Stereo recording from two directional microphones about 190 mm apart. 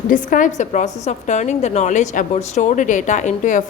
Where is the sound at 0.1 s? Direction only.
45° left (ahead or behind).